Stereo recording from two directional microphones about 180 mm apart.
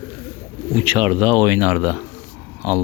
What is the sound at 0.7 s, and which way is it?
Speech, 30° right (ahead or behind).